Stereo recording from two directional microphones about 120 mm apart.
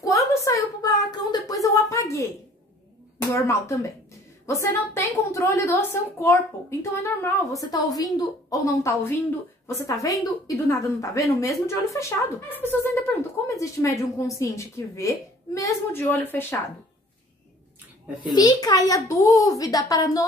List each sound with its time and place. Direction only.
0.3 s a sound: 25° left (ahead or behind)
3.2 s a woman's voice: 25° left (ahead or behind)
18.3 s a child's voice: 35° left (ahead or behind)